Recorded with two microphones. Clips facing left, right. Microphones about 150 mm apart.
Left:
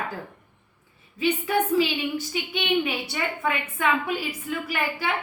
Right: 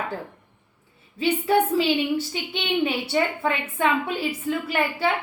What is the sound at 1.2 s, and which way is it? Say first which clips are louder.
A woman's voice: right 3 dB; 30° right (ahead or behind).